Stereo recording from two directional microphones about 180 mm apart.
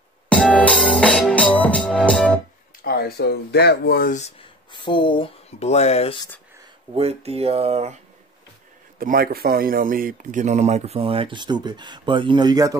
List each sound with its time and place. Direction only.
0.3 s music: 5° left (ahead or behind)
2.8 s speech: 60° left (ahead or behind)
4.2 s speech: 30° left (ahead or behind)
6.9 s speech: 35° right (ahead or behind)
9.0 s speech: 55° right (ahead or behind); by 12.7 s 20° right (ahead or behind)